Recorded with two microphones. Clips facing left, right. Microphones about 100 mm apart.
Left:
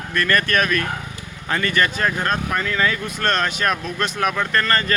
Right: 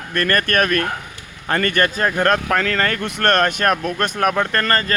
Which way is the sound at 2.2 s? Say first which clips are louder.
Right 5 dB; 85° right.